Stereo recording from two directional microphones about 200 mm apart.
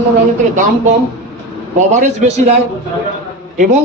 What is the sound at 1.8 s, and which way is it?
Speech, 35° right (ahead or behind).